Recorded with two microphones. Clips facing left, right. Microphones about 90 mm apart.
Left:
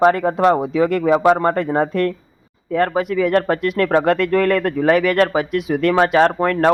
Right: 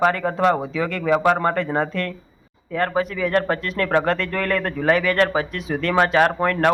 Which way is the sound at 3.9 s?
15° left (ahead or behind).